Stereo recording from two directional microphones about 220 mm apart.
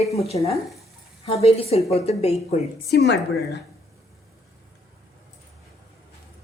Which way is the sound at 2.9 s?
50° left (ahead or behind).